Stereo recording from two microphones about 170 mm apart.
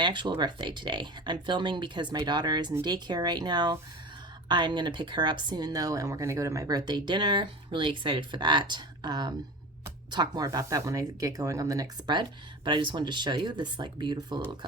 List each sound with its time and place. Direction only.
0.0 s speech: 25° right (ahead or behind)